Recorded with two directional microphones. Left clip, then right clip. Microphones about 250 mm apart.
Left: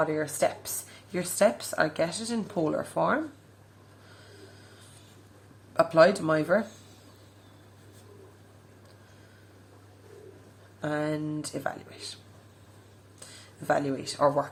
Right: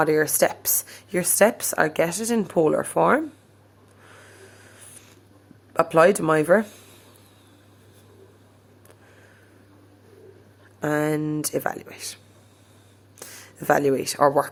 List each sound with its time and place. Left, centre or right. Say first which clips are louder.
0.0 s speech: right 7 dB; right
5.7 s speech: right 3 dB; right
10.8 s speech: right 7 dB; right
13.7 s speech: right 8 dB; right